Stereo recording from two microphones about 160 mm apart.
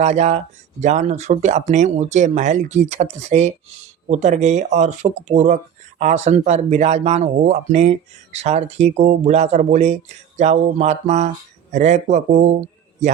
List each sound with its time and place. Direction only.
0.0 s a man's voice: 45° right (ahead or behind)